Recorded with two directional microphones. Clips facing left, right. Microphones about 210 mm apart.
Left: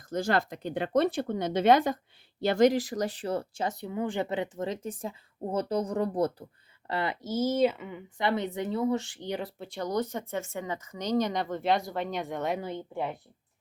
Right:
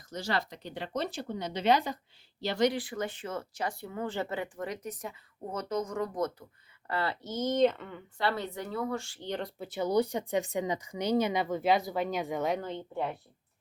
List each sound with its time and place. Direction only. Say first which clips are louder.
0.1 s speech: left 6 dB; 50° left (ahead or behind)
6.8 s speech: left 2 dB; 20° left (ahead or behind)
9.6 s speech: right 6 dB; 5° right (ahead or behind)